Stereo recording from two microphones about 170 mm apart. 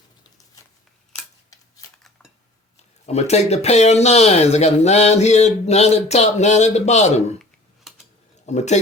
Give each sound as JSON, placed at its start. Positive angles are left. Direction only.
{"t": 3.1, "sound": "speech", "side_deg": 40}
{"t": 7.9, "sound": "typing", "side_deg": 0}
{"t": 8.4, "sound": "speech", "side_deg": 40}